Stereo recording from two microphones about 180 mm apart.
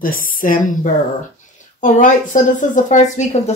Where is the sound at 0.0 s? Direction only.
50° left (ahead or behind).